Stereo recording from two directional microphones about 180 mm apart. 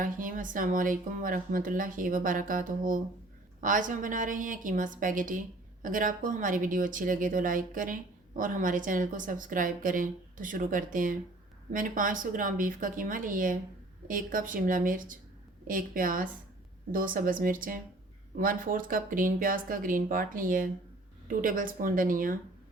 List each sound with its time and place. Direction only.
0.0 s a woman's voice: 50° right (ahead or behind)